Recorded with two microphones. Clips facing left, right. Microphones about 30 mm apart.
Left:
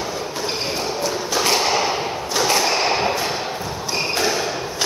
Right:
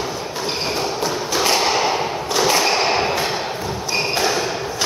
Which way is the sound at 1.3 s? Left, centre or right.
Centre.